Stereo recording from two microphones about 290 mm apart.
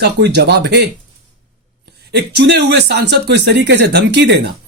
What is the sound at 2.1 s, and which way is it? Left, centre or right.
Speech, right.